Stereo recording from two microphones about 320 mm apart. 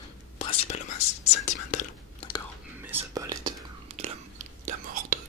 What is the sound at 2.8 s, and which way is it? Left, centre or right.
Whispering, centre.